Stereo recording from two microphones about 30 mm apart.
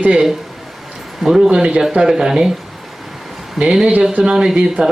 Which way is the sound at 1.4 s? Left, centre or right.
Right.